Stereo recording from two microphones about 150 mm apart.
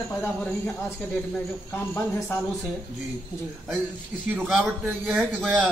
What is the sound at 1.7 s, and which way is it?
Speech, 15° left (ahead or behind).